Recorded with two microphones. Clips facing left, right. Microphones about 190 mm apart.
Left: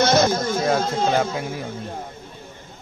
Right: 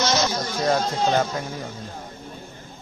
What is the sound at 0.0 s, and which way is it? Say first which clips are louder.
Chatter: left 5 dB; 55° left (ahead or behind).